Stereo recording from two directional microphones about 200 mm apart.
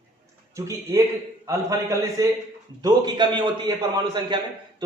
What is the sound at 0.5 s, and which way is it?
A man's voice, 15° right (ahead or behind).